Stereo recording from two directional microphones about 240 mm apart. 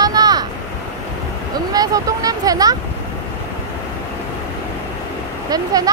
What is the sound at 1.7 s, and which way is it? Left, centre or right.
Vehicle, centre.